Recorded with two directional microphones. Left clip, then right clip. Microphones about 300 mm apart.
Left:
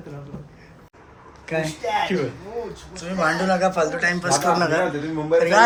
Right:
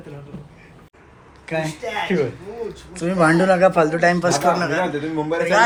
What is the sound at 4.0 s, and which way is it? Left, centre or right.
Speech, centre.